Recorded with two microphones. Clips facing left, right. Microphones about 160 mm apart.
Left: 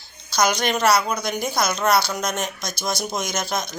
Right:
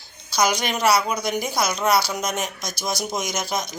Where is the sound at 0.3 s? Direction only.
10° right (ahead or behind).